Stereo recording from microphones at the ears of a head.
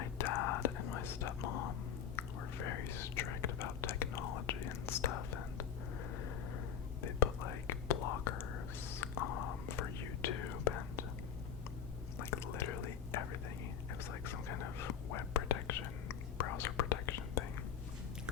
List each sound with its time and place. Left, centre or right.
0.0 s whispering: left
7.0 s whispering: left
12.2 s whispering: left